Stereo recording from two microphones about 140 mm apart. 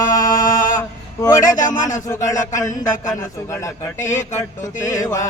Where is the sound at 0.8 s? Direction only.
25° left (ahead or behind).